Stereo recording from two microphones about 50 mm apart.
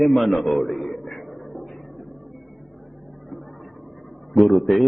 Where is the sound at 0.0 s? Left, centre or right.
Centre.